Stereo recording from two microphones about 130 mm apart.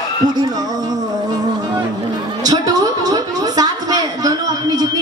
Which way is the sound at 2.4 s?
30° right (ahead or behind).